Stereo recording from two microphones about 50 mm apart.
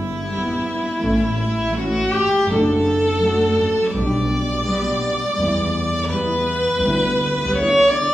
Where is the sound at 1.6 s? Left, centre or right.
Centre.